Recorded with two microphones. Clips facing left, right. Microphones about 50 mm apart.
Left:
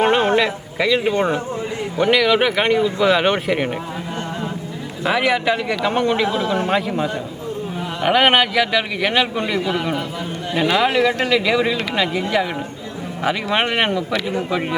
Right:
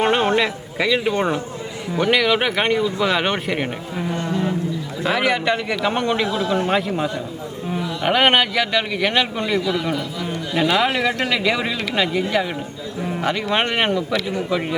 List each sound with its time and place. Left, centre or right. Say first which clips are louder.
0.0 s a sound: left 2 dB; centre
0.8 s speech: left 2 dB; centre
5.0 s speech: left 2 dB; centre
6.2 s a man's voice: left 2 dB; left
6.7 s speech: left 1 dB; centre
9.6 s a man's voice: even; left
10.8 s speech: left 2 dB; centre